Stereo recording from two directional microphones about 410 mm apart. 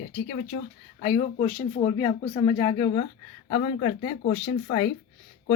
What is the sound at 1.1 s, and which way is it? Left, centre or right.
Speech, centre.